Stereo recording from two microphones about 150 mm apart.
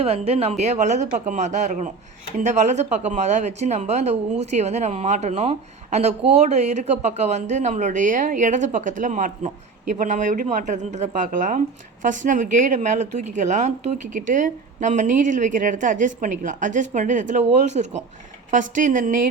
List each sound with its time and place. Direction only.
0.0 s a woman's voice: 40° right (ahead or behind); by 19.2 s 60° right (ahead or behind)